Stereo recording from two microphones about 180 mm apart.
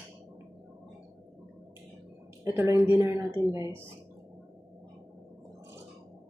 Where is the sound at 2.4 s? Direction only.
15° right (ahead or behind).